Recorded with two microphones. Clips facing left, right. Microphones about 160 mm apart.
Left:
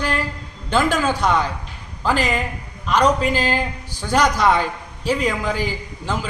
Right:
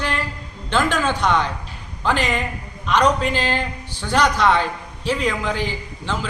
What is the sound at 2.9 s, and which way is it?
A man's voice, 5° left (ahead or behind).